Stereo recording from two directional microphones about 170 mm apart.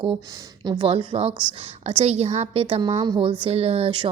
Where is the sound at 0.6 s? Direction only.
30° right (ahead or behind).